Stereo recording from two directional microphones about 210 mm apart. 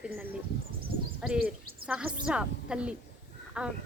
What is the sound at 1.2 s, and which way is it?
Speech, 5° right (ahead or behind).